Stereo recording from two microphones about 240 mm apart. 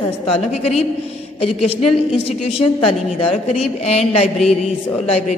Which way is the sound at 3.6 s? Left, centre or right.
Left.